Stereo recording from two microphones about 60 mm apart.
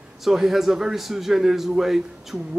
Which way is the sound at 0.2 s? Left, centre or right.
Centre.